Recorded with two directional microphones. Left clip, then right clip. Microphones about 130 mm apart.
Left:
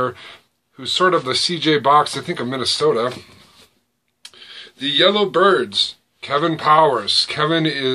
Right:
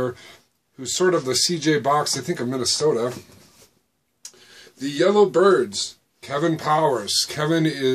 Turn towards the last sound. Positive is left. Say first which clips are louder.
# left 3 dB
turn(degrees=-40)  # may be behind; listen again after turning